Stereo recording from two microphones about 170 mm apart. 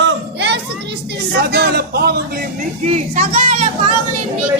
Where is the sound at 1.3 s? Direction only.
75° right (ahead or behind).